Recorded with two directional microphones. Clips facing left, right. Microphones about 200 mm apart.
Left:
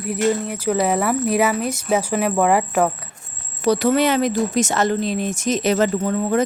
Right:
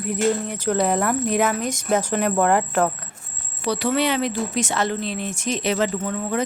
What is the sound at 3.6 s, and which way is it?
Speech, 45° left (ahead or behind).